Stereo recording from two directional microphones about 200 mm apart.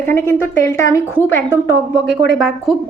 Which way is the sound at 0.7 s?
15° left (ahead or behind).